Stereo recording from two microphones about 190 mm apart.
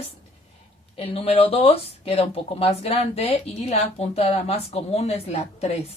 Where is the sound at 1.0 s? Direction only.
30° left (ahead or behind).